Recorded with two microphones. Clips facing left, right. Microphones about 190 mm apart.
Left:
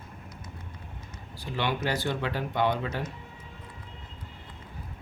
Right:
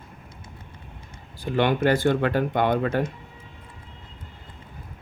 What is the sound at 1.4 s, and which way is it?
Speech, 50° right (ahead or behind).